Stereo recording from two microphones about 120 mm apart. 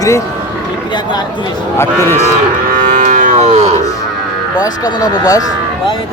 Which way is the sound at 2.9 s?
90° right.